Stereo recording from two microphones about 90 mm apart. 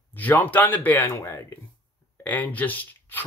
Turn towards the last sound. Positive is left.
turn(degrees=20)  # may be behind; listen again after turning